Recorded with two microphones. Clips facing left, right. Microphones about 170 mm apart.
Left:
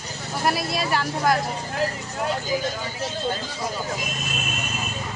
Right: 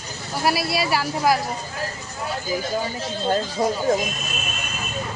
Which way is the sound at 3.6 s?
40° right (ahead or behind).